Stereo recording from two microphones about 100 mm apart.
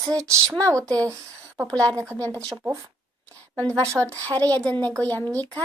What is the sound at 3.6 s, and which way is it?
A child's voice, 15° left (ahead or behind).